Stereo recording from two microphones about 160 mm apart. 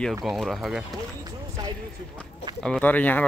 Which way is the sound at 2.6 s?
5° left (ahead or behind).